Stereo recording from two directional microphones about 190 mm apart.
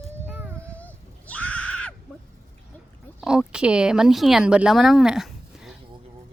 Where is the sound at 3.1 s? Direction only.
5° right (ahead or behind).